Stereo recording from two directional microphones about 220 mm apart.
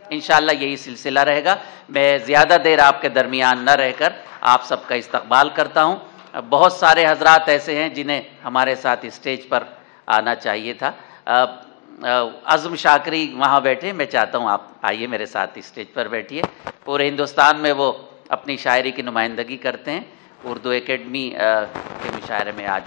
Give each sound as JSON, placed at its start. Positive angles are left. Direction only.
{"t": 0.1, "sound": "a man's voice", "side_deg": 15}